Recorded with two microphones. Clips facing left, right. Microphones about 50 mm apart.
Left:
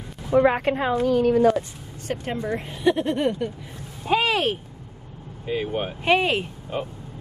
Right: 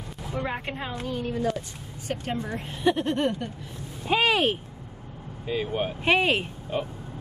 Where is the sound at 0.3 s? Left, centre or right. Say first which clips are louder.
Left 13 dB; left.